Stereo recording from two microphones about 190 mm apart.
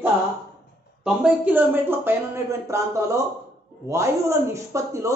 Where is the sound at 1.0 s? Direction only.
5° right (ahead or behind).